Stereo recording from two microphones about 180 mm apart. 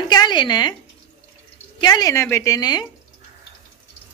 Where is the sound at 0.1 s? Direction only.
25° left (ahead or behind).